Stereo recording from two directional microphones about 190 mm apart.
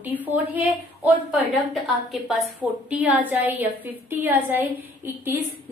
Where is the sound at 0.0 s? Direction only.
10° right (ahead or behind).